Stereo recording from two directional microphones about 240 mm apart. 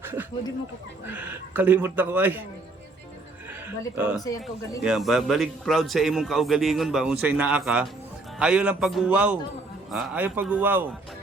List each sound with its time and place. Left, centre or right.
0.0 s snake: centre
1.0 s a man's voice: centre
4.1 s a man's voice: centre
4.8 s a man's voice: centre